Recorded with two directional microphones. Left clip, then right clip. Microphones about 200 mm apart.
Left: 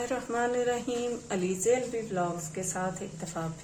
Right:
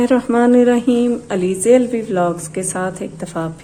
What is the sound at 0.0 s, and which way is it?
A woman's voice, 45° right (ahead or behind).